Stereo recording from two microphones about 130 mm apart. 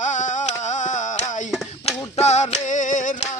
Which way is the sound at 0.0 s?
70° left (ahead or behind).